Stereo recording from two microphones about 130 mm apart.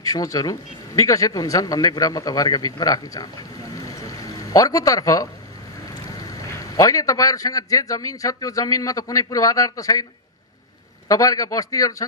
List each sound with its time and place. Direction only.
0.0 s a man's voice: 25° left (ahead or behind)
3.7 s music: 30° left (ahead or behind)
6.0 s a man's voice: 30° left (ahead or behind)
11.1 s a man's voice: 25° left (ahead or behind)